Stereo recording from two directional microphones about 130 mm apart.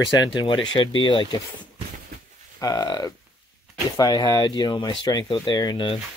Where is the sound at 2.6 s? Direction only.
30° left (ahead or behind).